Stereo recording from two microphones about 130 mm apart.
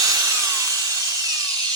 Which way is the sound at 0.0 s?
25° right (ahead or behind).